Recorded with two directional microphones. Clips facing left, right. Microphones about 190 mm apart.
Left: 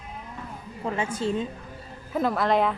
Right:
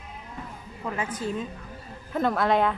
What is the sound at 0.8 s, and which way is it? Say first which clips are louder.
Speech: left 3 dB; 25° left (ahead or behind).